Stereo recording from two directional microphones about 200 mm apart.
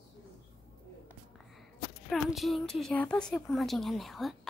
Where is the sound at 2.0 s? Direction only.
Centre (ahead or behind).